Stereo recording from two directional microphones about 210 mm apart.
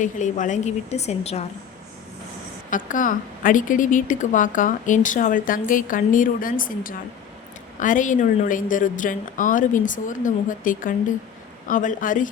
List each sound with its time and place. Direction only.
0.0 s a woman's voice: 35° left (ahead or behind)
2.6 s a woman's voice: 40° left (ahead or behind)